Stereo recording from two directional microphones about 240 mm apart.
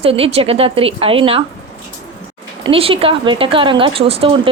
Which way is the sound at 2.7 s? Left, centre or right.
Right.